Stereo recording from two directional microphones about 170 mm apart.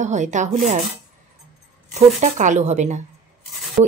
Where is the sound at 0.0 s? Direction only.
45° right (ahead or behind).